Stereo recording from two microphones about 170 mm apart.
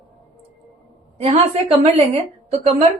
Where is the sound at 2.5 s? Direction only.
40° right (ahead or behind).